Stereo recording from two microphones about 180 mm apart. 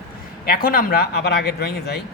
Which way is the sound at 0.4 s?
55° left (ahead or behind).